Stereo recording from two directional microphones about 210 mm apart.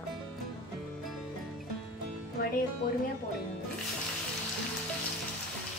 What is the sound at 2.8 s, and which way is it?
Music, 45° left (ahead or behind).